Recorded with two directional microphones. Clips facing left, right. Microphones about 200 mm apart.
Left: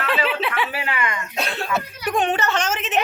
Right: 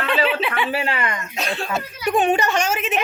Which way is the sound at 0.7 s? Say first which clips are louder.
Right 2 dB; 30° right (ahead or behind).